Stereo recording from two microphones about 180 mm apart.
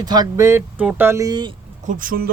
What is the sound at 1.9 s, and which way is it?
Speech, 50° right (ahead or behind).